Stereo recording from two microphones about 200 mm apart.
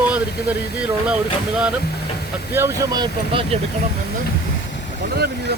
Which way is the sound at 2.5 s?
15° right (ahead or behind).